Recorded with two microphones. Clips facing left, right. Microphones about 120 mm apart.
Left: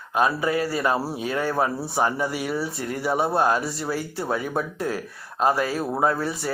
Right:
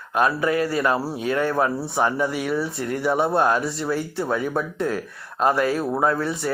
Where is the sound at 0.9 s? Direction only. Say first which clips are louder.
Right 1 dB; 10° left (ahead or behind).